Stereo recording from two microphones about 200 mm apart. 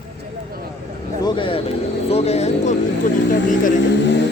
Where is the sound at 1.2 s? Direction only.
25° left (ahead or behind).